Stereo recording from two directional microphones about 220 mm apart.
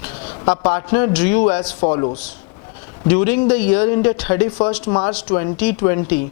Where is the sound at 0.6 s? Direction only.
10° left (ahead or behind).